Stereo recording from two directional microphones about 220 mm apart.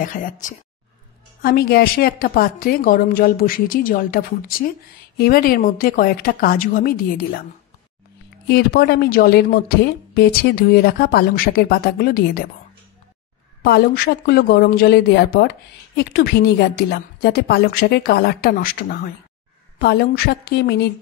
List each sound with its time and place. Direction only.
0.0 s a woman's voice: 35° left (ahead or behind)
8.5 s a woman's voice: 45° left (ahead or behind)
13.6 s a woman's voice: 45° left (ahead or behind)